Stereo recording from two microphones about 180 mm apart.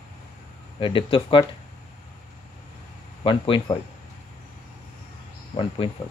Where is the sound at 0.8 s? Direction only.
30° left (ahead or behind).